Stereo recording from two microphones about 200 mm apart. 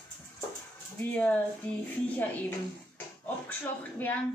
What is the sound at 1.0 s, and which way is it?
Speech, 5° left (ahead or behind).